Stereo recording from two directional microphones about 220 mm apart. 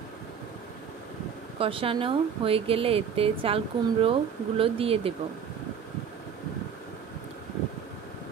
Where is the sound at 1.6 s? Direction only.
25° right (ahead or behind).